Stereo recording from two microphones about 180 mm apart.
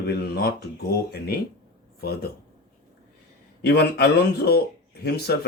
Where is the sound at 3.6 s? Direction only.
65° left (ahead or behind).